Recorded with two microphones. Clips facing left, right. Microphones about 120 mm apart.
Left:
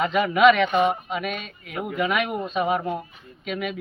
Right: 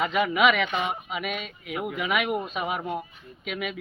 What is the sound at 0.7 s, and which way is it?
Speech, 45° left (ahead or behind).